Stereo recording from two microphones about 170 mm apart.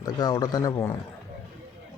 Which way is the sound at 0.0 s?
25° left (ahead or behind).